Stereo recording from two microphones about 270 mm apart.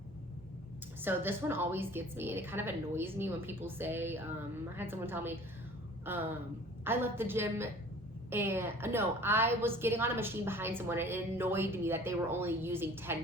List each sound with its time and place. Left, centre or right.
1.0 s a woman's voice: centre